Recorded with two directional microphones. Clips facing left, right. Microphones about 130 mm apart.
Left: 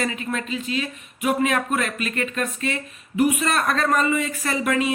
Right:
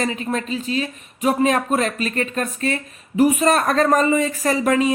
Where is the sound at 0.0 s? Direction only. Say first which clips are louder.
Right 3 dB; 35° right (ahead or behind).